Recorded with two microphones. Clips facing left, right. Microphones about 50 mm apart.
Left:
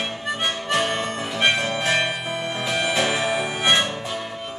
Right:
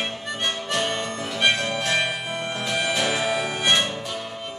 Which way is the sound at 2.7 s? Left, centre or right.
Centre.